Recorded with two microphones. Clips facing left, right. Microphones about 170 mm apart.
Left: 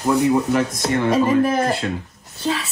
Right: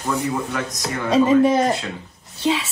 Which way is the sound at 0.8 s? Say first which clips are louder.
Left 6 dB; 30° left (ahead or behind).